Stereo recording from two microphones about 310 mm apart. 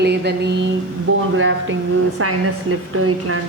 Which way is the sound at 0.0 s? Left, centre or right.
Right.